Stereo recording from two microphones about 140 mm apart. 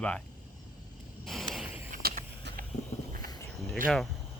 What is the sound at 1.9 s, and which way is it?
Vehicle, 80° right.